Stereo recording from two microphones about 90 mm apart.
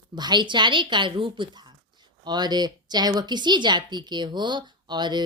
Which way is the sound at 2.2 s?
55° right (ahead or behind).